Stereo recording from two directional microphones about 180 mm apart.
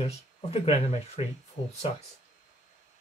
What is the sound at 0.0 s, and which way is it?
Speech, 35° left (ahead or behind).